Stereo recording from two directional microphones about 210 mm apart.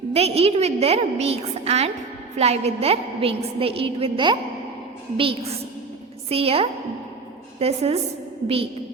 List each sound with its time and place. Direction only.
0.1 s a woman's voice: 30° right (ahead or behind)